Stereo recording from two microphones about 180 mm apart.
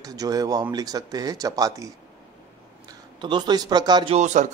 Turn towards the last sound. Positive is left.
turn(degrees=-40)  # may be behind; listen again after turning